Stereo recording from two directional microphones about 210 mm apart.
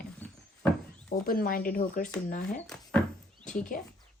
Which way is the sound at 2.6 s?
5° left (ahead or behind).